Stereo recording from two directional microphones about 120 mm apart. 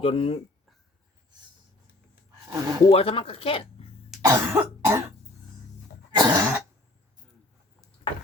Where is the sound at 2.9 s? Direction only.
55° left (ahead or behind).